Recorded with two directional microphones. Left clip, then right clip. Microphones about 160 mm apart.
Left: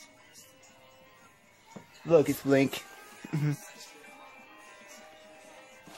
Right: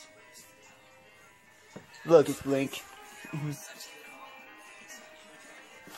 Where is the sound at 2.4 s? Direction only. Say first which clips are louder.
Left 5 dB; 50° left (ahead or behind).